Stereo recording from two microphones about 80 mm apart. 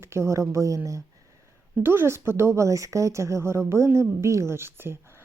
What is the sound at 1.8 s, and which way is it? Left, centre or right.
Speech, right.